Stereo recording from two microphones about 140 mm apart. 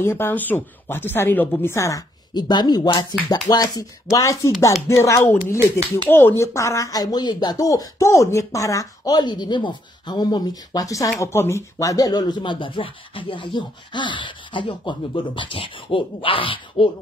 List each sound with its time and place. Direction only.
0.0 s speech: 15° left (ahead or behind); by 16.9 s 40° left (ahead or behind)